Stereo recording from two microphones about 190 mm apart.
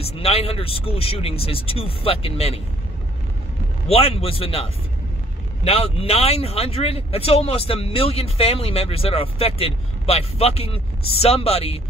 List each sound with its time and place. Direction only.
0.0 s speech: 30° left (ahead or behind)
3.9 s speech: 30° left (ahead or behind)